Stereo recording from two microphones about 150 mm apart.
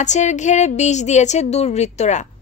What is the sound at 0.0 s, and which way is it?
A woman's voice, 50° left (ahead or behind).